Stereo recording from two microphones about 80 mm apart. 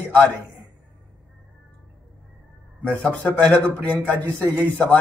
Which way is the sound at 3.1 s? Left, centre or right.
Centre.